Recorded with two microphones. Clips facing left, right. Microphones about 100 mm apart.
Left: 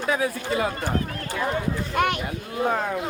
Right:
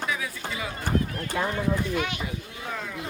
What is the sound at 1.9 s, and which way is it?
Speech, 55° left (ahead or behind).